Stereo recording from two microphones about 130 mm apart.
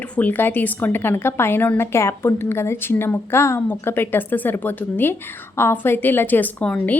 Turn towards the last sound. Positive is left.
turn(degrees=10)  # may be behind; listen again after turning